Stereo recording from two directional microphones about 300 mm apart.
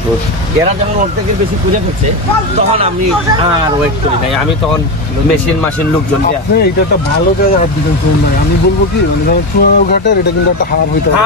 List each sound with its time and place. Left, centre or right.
9.3 s speech: left